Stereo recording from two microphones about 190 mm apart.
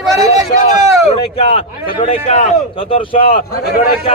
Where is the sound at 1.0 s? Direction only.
30° left (ahead or behind).